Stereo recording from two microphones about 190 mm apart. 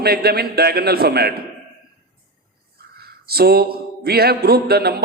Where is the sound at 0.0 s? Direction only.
55° right (ahead or behind).